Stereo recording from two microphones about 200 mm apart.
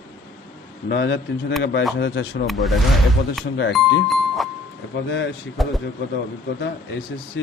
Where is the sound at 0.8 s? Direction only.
60° left (ahead or behind).